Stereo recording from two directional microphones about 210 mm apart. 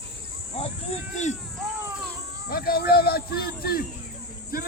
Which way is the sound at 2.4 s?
45° left (ahead or behind).